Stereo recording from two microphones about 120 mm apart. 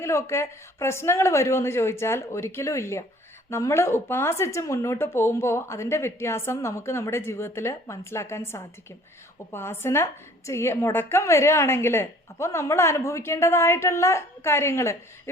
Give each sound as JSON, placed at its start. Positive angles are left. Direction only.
{"t": 0.0, "sound": "a woman's voice", "side_deg": 25}